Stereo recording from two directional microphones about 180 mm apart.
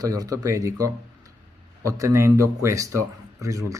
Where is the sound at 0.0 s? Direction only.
20° right (ahead or behind).